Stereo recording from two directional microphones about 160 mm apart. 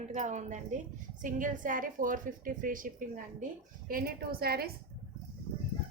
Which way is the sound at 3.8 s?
65° right (ahead or behind).